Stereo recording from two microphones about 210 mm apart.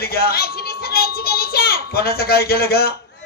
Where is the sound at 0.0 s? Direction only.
45° left (ahead or behind).